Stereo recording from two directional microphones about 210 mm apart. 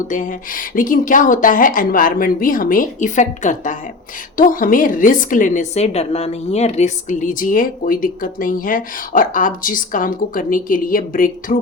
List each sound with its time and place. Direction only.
0.1 s a woman's voice: 40° left (ahead or behind)